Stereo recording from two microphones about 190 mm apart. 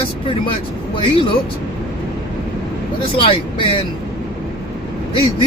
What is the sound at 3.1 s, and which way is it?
Speech, 25° left (ahead or behind).